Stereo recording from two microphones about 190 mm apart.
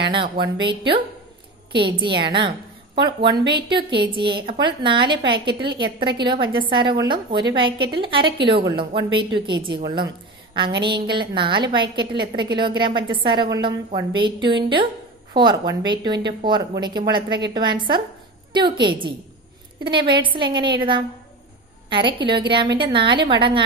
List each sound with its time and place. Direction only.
0.1 s a woman's voice: 25° right (ahead or behind)